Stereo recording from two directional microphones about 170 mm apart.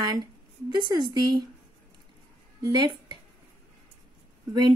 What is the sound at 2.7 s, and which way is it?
Speech, 25° right (ahead or behind).